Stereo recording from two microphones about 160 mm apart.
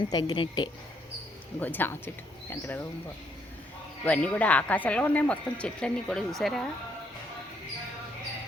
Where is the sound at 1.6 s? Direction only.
10° left (ahead or behind).